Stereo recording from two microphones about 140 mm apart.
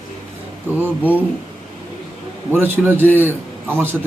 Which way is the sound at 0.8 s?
15° right (ahead or behind).